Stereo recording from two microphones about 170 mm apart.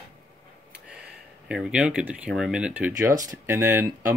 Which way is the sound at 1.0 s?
5° right (ahead or behind).